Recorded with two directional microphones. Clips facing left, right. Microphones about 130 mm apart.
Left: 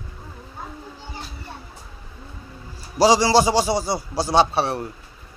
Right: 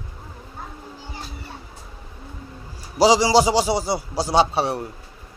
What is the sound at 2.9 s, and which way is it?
A man's voice, 15° right (ahead or behind).